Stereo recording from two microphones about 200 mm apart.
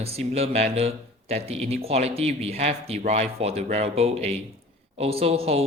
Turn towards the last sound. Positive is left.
turn(degrees=-30)  # may be behind; listen again after turning